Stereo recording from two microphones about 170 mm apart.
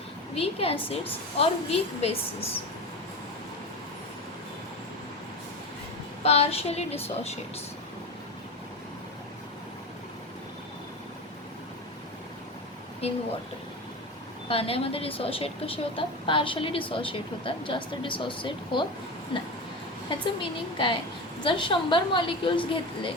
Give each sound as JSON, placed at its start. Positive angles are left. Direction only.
{"t": 0.3, "sound": "a woman's voice", "side_deg": 35}
{"t": 6.2, "sound": "a woman's voice", "side_deg": 35}
{"t": 13.0, "sound": "a woman's voice", "side_deg": 35}
{"t": 14.4, "sound": "a woman's voice", "side_deg": 35}